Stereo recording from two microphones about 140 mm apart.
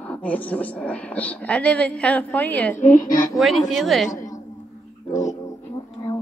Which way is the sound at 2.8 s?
70° left (ahead or behind).